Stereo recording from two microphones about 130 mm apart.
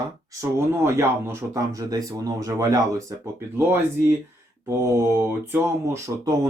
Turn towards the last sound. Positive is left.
turn(degrees=-20)  # may be behind; listen again after turning